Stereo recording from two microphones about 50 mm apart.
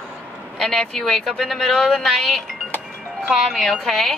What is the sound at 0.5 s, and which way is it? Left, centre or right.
Speech, centre.